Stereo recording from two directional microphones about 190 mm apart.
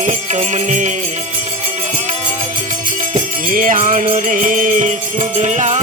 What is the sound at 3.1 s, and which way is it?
Music, 45° right (ahead or behind).